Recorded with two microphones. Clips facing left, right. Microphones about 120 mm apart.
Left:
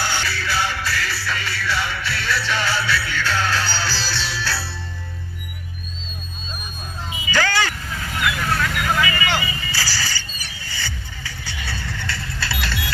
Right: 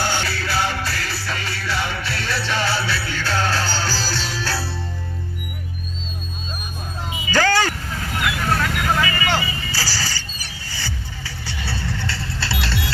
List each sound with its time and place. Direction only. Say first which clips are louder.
0.0 s music: right 1 dB; 45° right (ahead or behind)
7.3 s vehicle: right 3 dB; 40° right (ahead or behind)